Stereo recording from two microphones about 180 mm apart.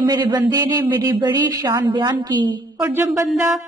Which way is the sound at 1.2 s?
20° right (ahead or behind).